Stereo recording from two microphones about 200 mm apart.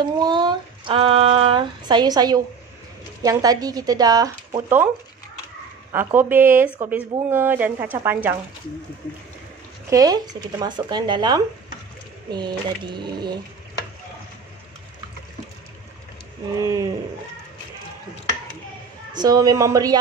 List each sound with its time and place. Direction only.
0.0 s a sound: 20° right (ahead or behind)
3.2 s speech: 20° right (ahead or behind)
5.9 s speech: 10° right (ahead or behind)
9.8 s speech: 15° right (ahead or behind)
16.5 s speech: 15° right (ahead or behind)
19.1 s speech: 20° right (ahead or behind)